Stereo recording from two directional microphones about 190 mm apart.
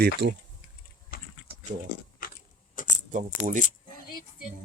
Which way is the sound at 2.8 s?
45° left (ahead or behind).